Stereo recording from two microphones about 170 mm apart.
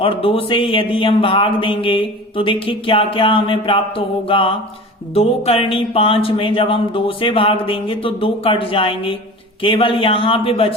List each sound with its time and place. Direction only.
0.0 s speech: 30° left (ahead or behind)